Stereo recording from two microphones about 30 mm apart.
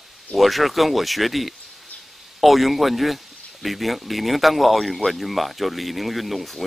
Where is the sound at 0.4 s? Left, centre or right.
Centre.